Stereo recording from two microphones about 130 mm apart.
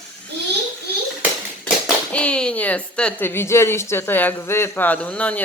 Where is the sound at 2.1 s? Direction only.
10° left (ahead or behind).